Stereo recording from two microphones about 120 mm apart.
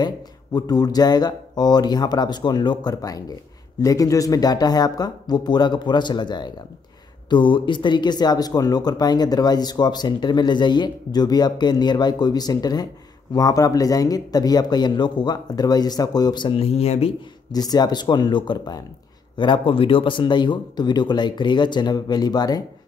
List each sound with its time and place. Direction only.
0.0 s speech: 35° left (ahead or behind); by 17.1 s 60° left (ahead or behind)
17.5 s speech: 35° left (ahead or behind)